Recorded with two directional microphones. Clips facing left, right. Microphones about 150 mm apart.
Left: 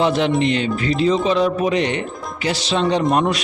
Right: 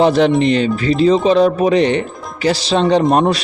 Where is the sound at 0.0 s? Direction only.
40° right (ahead or behind).